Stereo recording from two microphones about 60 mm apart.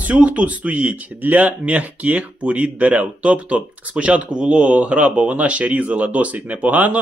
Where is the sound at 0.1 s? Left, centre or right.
Right.